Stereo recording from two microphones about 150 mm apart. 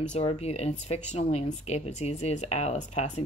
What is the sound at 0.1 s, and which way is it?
Speech, 45° left (ahead or behind).